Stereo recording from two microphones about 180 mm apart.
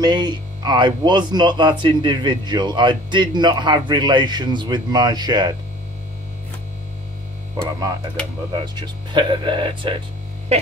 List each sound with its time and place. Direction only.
0.0 s speech: 25° right (ahead or behind)
8.5 s speech: 25° right (ahead or behind)
10.5 s a sound: 35° right (ahead or behind)